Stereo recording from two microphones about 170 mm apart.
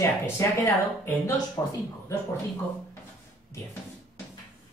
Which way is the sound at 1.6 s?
20° left (ahead or behind).